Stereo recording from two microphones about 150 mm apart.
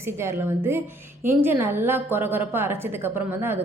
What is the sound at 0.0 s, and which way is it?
A woman's voice, 15° right (ahead or behind).